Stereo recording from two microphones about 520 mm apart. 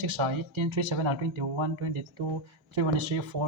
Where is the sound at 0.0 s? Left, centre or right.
Right.